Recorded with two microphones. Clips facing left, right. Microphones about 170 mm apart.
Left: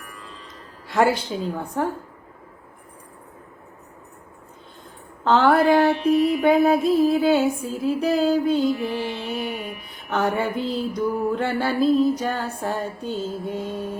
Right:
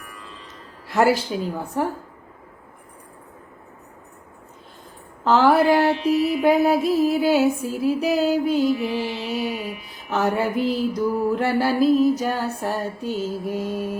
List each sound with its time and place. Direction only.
0.9 s speech: 5° right (ahead or behind)
1.3 s music: 5° right (ahead or behind)
5.2 s music: 10° right (ahead or behind)
5.9 s mantra: 55° left (ahead or behind)
6.7 s music: 10° right (ahead or behind)
9.7 s a sound: 55° left (ahead or behind)
10.1 s music: 5° right (ahead or behind)